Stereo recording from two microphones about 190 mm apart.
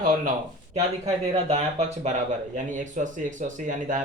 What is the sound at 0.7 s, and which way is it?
Speech, 35° right (ahead or behind).